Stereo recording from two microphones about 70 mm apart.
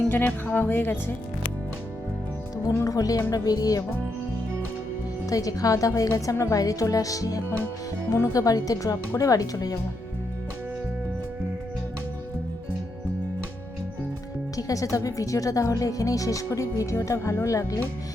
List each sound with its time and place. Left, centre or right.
0.1 s speech: left
2.7 s speech: left
5.3 s speech: left
14.5 s speech: left